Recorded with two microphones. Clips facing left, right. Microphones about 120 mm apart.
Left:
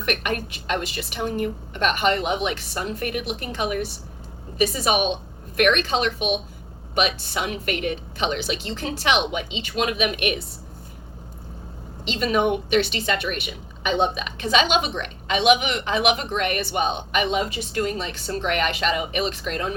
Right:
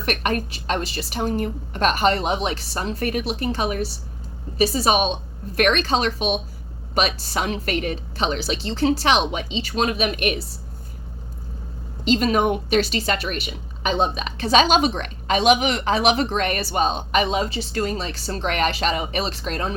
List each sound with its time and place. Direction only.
0.0 s a woman's voice: 35° right (ahead or behind)
12.0 s a woman's voice: 40° right (ahead or behind)